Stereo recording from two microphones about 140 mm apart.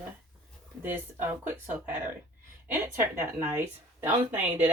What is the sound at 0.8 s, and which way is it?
Speech, 15° right (ahead or behind).